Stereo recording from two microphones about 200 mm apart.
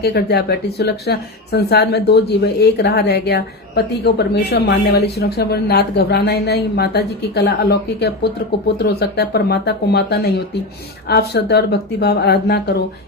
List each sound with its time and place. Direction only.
0.0 s speech: 55° left (ahead or behind)